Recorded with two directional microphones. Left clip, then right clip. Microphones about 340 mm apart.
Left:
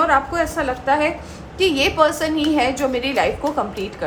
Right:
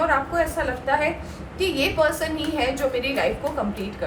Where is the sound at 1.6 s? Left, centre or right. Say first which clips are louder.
Left 5 dB; left.